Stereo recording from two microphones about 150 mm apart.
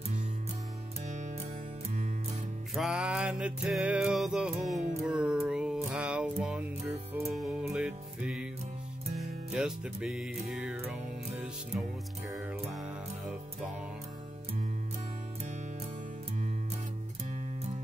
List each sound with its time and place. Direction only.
1.0 s music: 55° right (ahead or behind)
2.7 s music: 5° right (ahead or behind)
9.5 s music: 5° right (ahead or behind)
12.4 s music: 5° right (ahead or behind)